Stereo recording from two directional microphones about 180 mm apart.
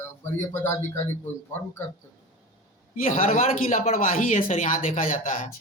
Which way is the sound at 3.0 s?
50° left (ahead or behind).